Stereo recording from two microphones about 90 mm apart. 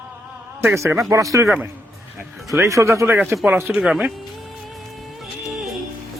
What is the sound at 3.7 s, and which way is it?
Speech, 5° right (ahead or behind).